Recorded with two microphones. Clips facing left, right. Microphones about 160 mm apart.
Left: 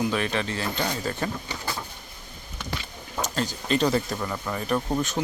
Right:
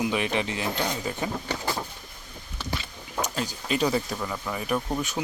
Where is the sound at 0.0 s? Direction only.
15° right (ahead or behind).